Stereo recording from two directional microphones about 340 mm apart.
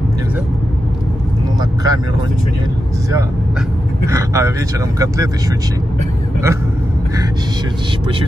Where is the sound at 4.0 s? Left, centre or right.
Centre.